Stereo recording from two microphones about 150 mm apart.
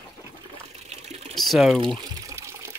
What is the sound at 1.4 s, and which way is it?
Speech, centre (ahead or behind).